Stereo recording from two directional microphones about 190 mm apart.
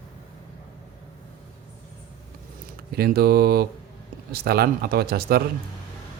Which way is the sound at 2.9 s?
55° right (ahead or behind).